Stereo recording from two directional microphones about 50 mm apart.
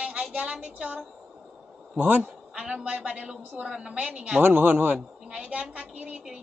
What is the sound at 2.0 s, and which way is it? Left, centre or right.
Speech, right.